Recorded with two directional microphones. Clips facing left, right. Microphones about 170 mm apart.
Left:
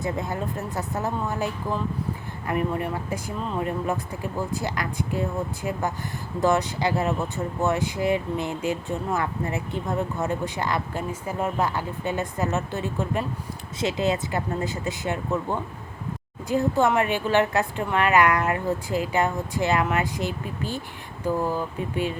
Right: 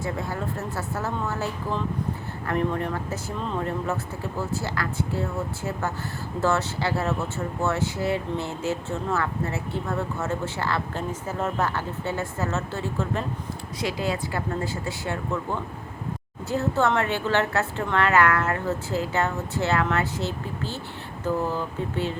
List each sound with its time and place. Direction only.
0.0 s speech: 20° left (ahead or behind)
2.5 s speech: 10° left (ahead or behind)